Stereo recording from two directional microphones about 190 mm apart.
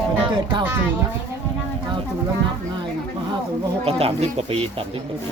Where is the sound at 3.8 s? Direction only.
30° right (ahead or behind).